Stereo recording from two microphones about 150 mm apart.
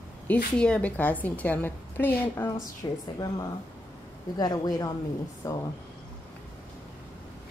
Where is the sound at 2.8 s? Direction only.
25° left (ahead or behind).